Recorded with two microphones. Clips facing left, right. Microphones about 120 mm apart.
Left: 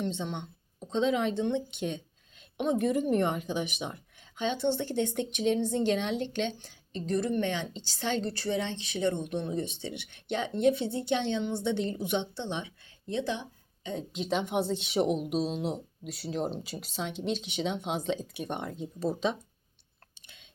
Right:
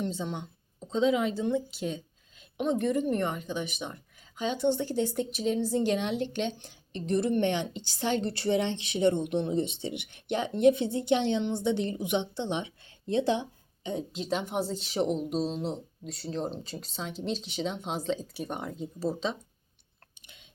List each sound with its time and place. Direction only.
0.2 s a woman's voice: 5° right (ahead or behind); by 3.9 s 15° left (ahead or behind)
4.2 s speech: 5° right (ahead or behind)
8.4 s speech: 25° right (ahead or behind)
13.1 s a sound: 30° right (ahead or behind)
14.1 s a woman's voice: centre (ahead or behind)